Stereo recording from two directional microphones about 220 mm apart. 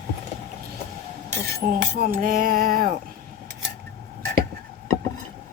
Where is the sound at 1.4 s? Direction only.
40° right (ahead or behind).